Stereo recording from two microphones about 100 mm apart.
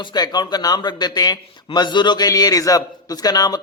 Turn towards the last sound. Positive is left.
turn(degrees=40)  # may be behind; listen again after turning